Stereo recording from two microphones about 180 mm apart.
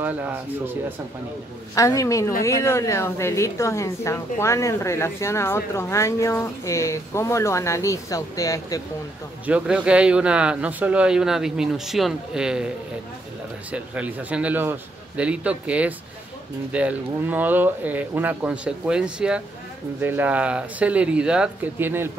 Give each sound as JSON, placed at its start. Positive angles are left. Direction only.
{"t": 0.0, "sound": "speech", "side_deg": -10}
{"t": 1.8, "sound": "speech", "side_deg": 20}
{"t": 9.5, "sound": "speech", "side_deg": -5}